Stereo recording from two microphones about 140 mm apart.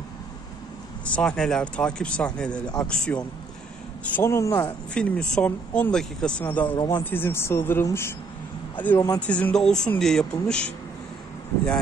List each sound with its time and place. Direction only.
1.0 s speech: 5° left (ahead or behind)
4.9 s speech: 10° left (ahead or behind)